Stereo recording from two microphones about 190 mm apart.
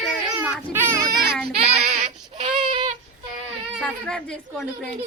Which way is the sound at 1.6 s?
35° right (ahead or behind).